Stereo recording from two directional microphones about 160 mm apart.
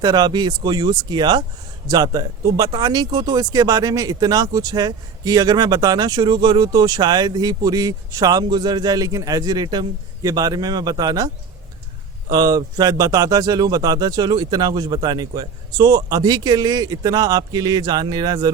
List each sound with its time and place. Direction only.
0.0 s speech: 25° right (ahead or behind)
12.3 s speech: 25° right (ahead or behind)